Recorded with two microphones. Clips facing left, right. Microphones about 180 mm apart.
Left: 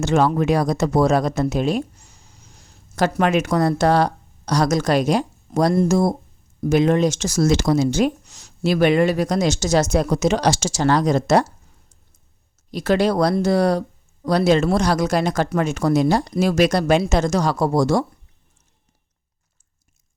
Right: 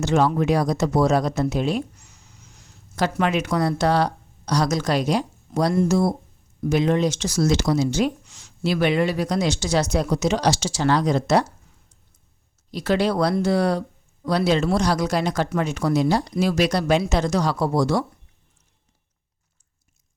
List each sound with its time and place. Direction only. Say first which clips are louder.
0.0 s speech: left 2 dB; 50° left (ahead or behind)
2.0 s a sound: left 1 dB; 30° left (ahead or behind)
2.9 s speech: left 4 dB; 45° left (ahead or behind)
12.7 s speech: left 3 dB; 45° left (ahead or behind)